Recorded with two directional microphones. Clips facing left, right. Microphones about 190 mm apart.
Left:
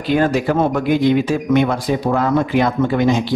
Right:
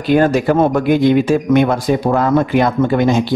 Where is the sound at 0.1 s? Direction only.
50° right (ahead or behind).